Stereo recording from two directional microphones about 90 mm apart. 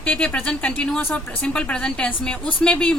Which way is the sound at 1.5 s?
10° left (ahead or behind).